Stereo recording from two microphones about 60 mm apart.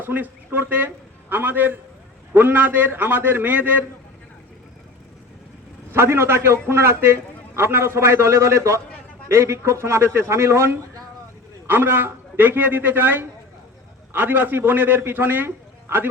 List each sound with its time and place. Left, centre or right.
0.0 s a man's voice: right
5.9 s a man's voice: right